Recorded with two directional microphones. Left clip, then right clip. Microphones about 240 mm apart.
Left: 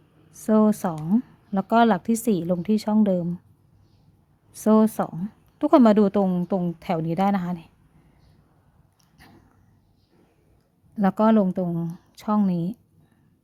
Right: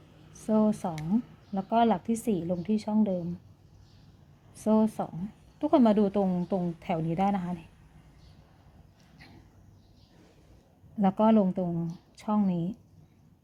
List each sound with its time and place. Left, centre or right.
0.3 s speech: centre
4.5 s a woman's voice: centre
10.9 s a woman's voice: centre